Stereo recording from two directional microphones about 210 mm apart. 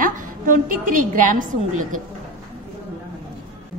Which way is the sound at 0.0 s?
40° right (ahead or behind).